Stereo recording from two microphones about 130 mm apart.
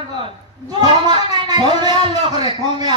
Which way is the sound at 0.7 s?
35° right (ahead or behind).